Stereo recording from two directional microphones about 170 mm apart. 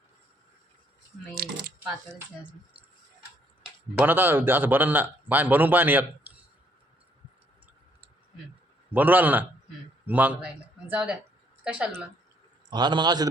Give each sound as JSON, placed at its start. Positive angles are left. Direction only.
{"t": 1.4, "sound": "a sound", "side_deg": -75}
{"t": 4.0, "sound": "a man's voice", "side_deg": -15}
{"t": 8.9, "sound": "a man's voice", "side_deg": -10}
{"t": 12.7, "sound": "a man's voice", "side_deg": -25}